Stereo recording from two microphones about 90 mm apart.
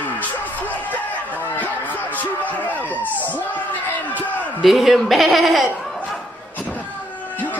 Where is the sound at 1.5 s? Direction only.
20° left (ahead or behind).